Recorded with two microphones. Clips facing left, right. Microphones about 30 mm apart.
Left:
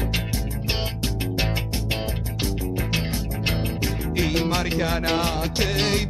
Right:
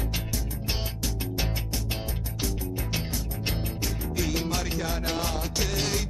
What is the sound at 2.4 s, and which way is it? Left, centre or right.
Music, left.